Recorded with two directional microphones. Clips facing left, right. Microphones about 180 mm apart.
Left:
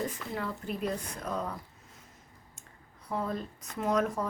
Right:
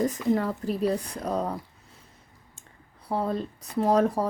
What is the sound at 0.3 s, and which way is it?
Speech, 40° right (ahead or behind).